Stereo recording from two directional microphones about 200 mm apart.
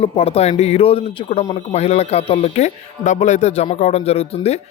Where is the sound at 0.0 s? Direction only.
30° left (ahead or behind).